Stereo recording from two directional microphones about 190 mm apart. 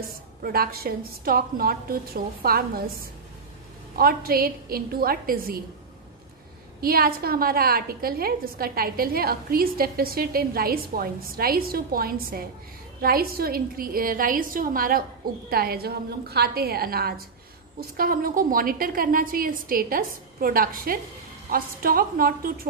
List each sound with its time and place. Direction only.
0.4 s a woman's voice: 50° right (ahead or behind)
6.8 s a woman's voice: 50° right (ahead or behind)